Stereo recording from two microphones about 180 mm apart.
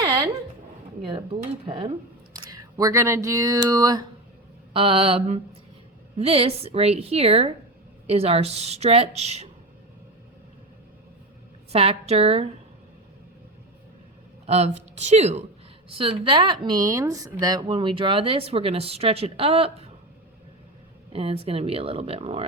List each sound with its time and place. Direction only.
0.0 s a sound: 25° right (ahead or behind)
1.0 s speech: 30° right (ahead or behind)
4.7 s a woman's voice: 30° right (ahead or behind)
11.7 s a woman's voice: 35° right (ahead or behind)
14.4 s speech: 35° right (ahead or behind)
21.1 s a woman's voice: 30° right (ahead or behind)